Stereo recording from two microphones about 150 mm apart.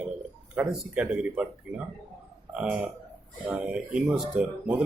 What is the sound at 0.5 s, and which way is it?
A man's voice, 5° right (ahead or behind).